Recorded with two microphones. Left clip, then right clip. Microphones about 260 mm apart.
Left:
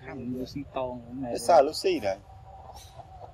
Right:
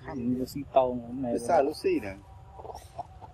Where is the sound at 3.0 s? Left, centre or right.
Right.